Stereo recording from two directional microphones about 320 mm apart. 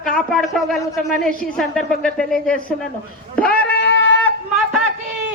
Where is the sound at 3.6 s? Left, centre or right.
Left.